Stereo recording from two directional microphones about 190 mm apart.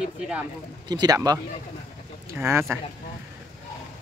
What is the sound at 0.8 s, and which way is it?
Speech, 20° right (ahead or behind).